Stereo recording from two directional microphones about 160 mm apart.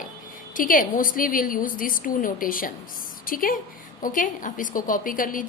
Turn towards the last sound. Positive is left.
turn(degrees=60)  # may be behind; listen again after turning